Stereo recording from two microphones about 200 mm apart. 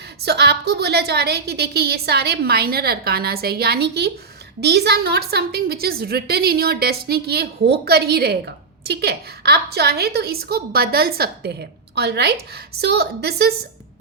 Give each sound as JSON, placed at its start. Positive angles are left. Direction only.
{"t": 0.2, "sound": "a woman's voice", "side_deg": -55}